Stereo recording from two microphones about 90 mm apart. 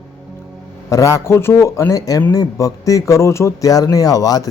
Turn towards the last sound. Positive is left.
turn(degrees=40)  # may be behind; listen again after turning